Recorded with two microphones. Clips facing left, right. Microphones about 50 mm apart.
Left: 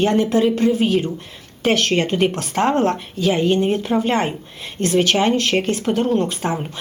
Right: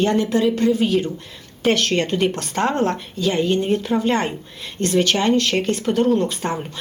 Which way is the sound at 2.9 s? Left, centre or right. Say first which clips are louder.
Left 2 dB; centre.